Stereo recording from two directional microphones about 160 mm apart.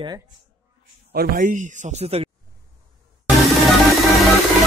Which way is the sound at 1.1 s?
70° right (ahead or behind).